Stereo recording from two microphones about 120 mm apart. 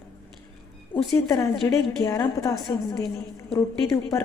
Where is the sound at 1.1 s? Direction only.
25° left (ahead or behind).